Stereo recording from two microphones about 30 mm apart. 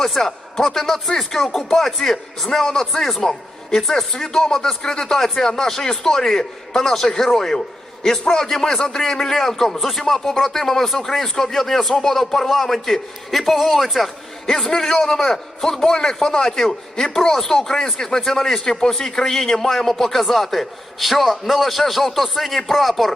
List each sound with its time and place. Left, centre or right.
0.0 s a man's voice: centre
3.2 s a man's voice: left
5.1 s a man's voice: centre
8.4 s a man's voice: centre
14.8 s speech: left
15.1 s a man's voice: centre